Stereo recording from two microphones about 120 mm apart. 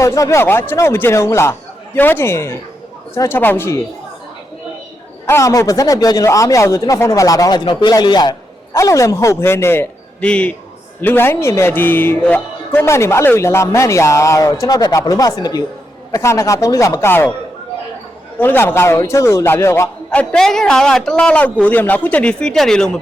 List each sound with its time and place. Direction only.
0.0 s speech: 25° left (ahead or behind)
5.2 s speech: 25° left (ahead or behind)
18.3 s speech: 15° left (ahead or behind)
20.1 s a man's voice: 10° left (ahead or behind)